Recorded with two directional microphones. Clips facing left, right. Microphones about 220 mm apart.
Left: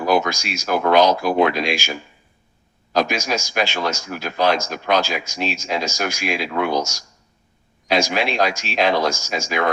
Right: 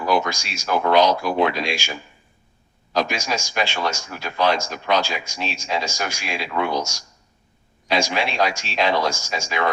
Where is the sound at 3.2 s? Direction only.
45° left (ahead or behind).